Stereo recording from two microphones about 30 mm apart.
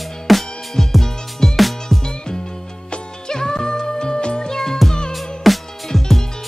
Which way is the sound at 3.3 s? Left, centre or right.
Left.